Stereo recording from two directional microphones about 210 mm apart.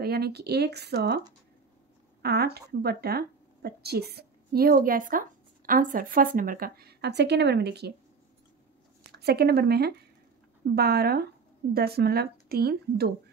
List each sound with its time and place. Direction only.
0.0 s speech: 50° right (ahead or behind)
2.2 s speech: 50° right (ahead or behind)
9.2 s speech: 50° right (ahead or behind)